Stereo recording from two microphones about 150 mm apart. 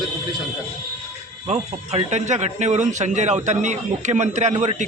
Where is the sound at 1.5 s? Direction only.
45° right (ahead or behind).